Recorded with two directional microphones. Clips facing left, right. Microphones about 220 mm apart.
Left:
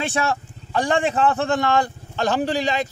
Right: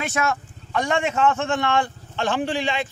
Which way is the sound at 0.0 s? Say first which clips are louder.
Left 1 dB; 30° left (ahead or behind).